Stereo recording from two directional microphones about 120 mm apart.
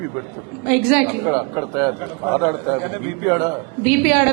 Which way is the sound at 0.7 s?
20° right (ahead or behind).